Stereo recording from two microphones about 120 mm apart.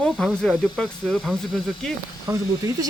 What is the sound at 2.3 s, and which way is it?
Speech, 30° right (ahead or behind).